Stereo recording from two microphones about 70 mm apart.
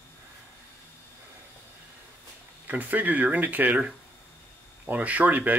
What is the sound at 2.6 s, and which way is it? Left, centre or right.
Speech, right.